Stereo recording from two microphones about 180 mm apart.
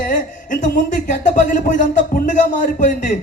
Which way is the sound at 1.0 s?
45° left (ahead or behind).